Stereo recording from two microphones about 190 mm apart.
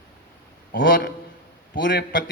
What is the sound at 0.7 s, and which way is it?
A man's voice, 70° left (ahead or behind).